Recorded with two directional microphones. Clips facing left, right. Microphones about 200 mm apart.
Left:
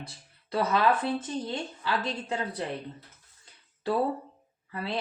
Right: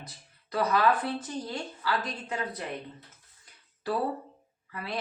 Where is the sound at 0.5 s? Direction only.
25° left (ahead or behind).